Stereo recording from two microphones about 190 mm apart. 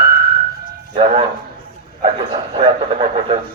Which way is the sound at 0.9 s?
30° right (ahead or behind).